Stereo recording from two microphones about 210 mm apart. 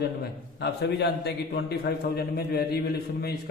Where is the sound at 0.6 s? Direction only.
55° left (ahead or behind).